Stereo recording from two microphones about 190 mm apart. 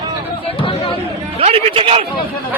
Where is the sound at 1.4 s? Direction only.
30° right (ahead or behind).